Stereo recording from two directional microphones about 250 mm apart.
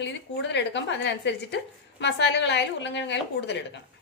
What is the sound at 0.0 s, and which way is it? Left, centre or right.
A woman's voice, left.